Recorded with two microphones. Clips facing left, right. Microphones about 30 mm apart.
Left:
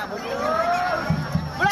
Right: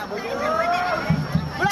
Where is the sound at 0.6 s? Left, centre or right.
Centre.